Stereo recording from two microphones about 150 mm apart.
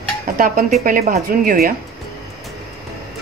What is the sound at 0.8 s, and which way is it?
Speech, 75° right (ahead or behind).